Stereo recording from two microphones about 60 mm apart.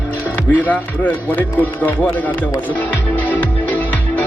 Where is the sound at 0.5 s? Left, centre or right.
Left.